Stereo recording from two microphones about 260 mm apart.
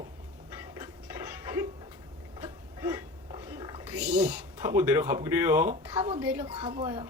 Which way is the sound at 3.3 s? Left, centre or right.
Centre.